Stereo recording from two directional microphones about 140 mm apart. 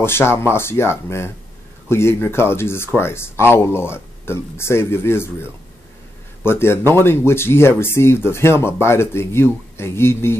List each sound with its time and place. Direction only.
0.0 s speech: 15° left (ahead or behind)